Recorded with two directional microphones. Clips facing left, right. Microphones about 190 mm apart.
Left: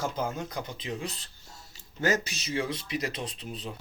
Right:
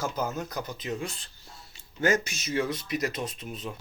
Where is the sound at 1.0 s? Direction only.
35° left (ahead or behind).